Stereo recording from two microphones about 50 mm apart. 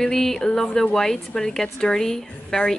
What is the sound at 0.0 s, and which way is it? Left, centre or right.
A woman's voice, centre.